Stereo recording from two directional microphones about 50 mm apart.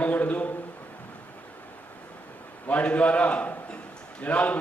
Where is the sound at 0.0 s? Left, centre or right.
Left.